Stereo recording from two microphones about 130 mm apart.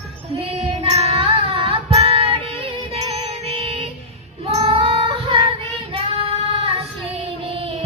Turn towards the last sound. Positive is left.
turn(degrees=-50)  # may be behind; listen again after turning